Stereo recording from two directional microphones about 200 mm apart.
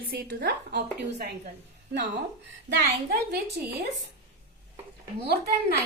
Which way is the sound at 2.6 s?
45° right (ahead or behind).